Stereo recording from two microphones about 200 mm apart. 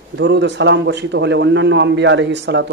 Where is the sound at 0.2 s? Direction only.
60° right (ahead or behind).